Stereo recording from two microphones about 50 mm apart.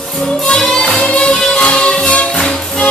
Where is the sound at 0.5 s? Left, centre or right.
Centre.